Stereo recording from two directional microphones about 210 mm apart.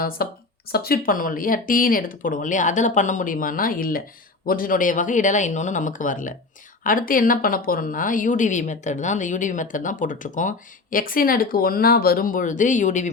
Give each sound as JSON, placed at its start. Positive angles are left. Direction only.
{"t": 0.2, "sound": "speech", "side_deg": 45}